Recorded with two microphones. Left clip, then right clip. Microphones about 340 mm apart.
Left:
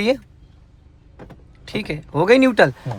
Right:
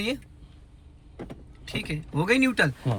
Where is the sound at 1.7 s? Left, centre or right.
Centre.